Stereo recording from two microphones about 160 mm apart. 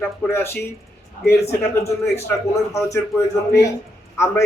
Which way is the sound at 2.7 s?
20° left (ahead or behind).